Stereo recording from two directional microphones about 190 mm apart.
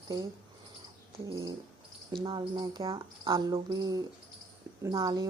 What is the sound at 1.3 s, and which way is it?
A woman's voice, 15° right (ahead or behind).